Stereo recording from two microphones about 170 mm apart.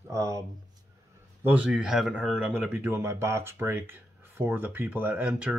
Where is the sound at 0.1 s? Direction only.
20° right (ahead or behind).